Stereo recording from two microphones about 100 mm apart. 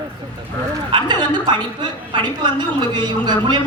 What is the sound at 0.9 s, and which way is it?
A woman's voice, 50° right (ahead or behind).